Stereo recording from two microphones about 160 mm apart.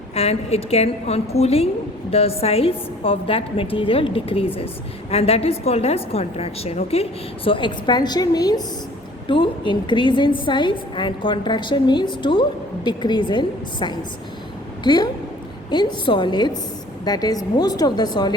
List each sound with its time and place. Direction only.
0.1 s a woman's voice: 40° left (ahead or behind)